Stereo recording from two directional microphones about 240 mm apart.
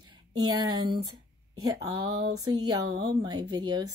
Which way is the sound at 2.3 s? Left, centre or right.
Centre.